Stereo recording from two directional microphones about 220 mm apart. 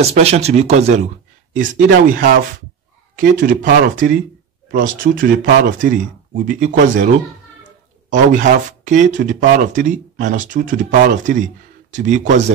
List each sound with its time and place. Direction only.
0.0 s speech: 30° right (ahead or behind)